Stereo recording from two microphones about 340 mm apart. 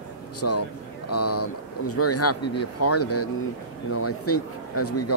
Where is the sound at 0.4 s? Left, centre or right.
Left.